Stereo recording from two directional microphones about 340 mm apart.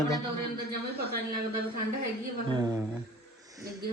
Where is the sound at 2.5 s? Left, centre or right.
Centre.